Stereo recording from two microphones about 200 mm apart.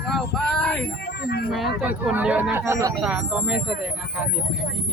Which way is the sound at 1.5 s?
Centre (ahead or behind).